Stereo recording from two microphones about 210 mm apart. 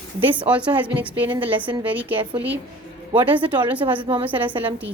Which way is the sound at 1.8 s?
5° right (ahead or behind).